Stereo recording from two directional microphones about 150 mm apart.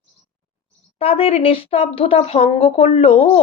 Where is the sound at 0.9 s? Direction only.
40° left (ahead or behind).